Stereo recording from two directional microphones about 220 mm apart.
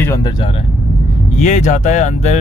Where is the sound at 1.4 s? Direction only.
35° left (ahead or behind).